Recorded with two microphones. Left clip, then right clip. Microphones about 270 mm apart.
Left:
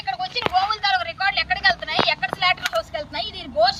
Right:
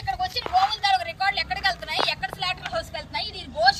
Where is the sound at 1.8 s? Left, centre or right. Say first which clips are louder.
Left 4 dB; centre.